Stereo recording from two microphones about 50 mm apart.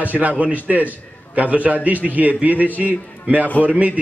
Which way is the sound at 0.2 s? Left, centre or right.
Right.